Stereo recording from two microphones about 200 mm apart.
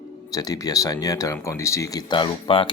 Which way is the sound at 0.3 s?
20° left (ahead or behind).